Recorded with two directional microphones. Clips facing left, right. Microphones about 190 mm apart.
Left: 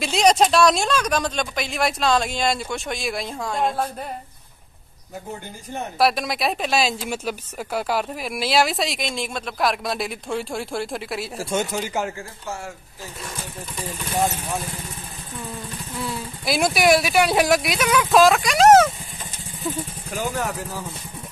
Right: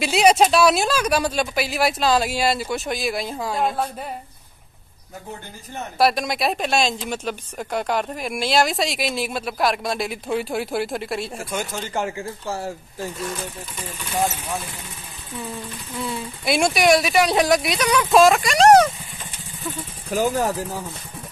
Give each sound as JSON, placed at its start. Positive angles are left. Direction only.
{"t": 0.0, "sound": "speech", "side_deg": -5}
{"t": 5.9, "sound": "speech", "side_deg": 0}
{"t": 12.4, "sound": "speech", "side_deg": -30}
{"t": 16.0, "sound": "speech", "side_deg": 0}
{"t": 20.1, "sound": "speech", "side_deg": -35}